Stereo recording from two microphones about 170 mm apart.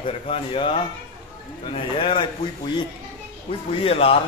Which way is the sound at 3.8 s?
35° left (ahead or behind).